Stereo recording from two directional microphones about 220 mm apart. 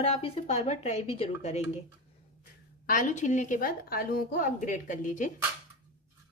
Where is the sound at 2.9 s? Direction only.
35° left (ahead or behind).